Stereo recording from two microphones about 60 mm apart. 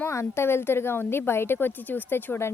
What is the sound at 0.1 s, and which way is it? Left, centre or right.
A woman's voice, left.